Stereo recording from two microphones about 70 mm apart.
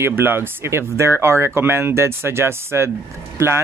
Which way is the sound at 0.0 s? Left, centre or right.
Right.